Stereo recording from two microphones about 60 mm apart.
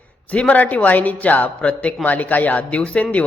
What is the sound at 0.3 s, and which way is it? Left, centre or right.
A man's voice, left.